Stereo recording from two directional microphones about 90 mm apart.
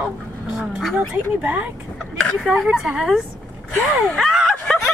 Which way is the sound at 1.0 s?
20° right (ahead or behind).